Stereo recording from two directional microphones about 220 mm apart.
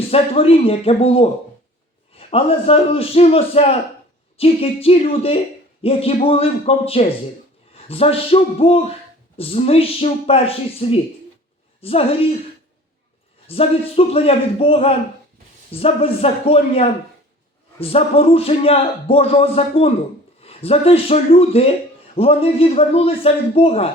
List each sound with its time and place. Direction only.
0.1 s speech: 25° left (ahead or behind)
13.5 s speech: 25° left (ahead or behind)